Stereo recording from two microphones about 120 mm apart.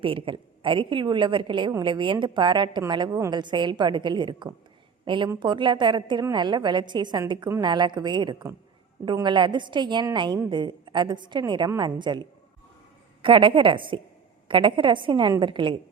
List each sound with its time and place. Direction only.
0.0 s a woman's voice: 50° right (ahead or behind)